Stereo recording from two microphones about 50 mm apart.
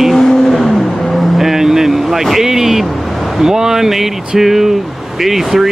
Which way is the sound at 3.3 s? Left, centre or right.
Centre.